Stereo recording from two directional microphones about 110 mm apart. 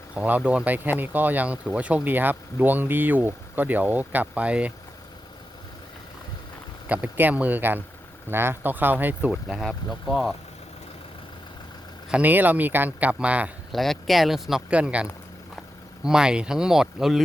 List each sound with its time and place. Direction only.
0.1 s speech: 10° right (ahead or behind)
6.8 s speech: 15° right (ahead or behind)
9.3 s speech: centre (ahead or behind)
12.1 s speech: 15° right (ahead or behind)
13.7 s speech: centre (ahead or behind)
16.0 s speech: 5° right (ahead or behind)